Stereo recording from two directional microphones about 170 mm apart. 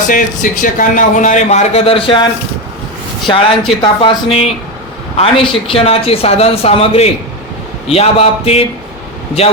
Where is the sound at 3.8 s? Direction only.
30° left (ahead or behind).